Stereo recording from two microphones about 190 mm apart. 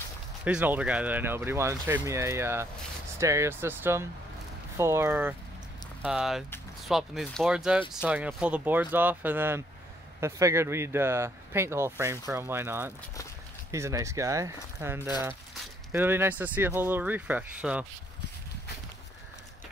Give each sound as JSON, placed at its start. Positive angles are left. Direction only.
{"t": 0.5, "sound": "speech", "side_deg": -5}